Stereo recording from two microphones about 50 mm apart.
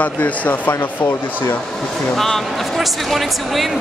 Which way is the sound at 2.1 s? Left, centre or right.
Centre.